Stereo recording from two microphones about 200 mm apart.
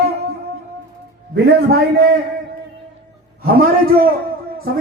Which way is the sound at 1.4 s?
55° right (ahead or behind).